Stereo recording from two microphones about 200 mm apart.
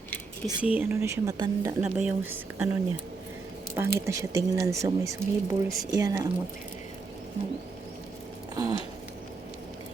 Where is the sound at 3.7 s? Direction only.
15° right (ahead or behind).